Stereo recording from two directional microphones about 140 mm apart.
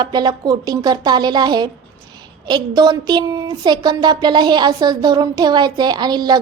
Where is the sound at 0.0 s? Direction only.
30° right (ahead or behind).